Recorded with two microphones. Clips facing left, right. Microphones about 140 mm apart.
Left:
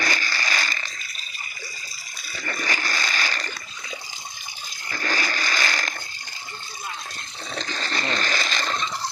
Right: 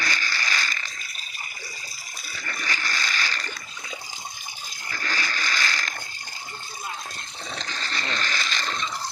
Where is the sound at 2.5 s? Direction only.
45° left (ahead or behind).